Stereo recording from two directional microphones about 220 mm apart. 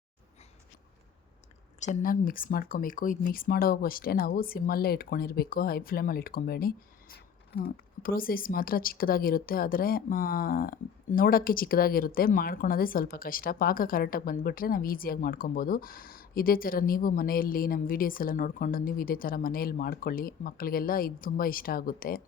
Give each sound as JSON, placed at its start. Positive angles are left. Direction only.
{"t": 1.8, "sound": "speech", "side_deg": 40}